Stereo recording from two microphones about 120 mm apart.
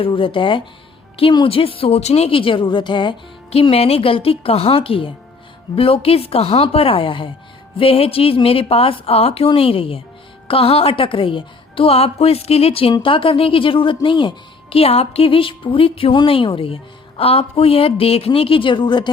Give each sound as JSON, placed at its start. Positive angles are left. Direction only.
{"t": 0.0, "sound": "a woman's voice", "side_deg": 45}